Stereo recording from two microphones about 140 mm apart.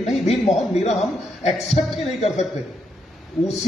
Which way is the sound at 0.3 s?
50° left (ahead or behind).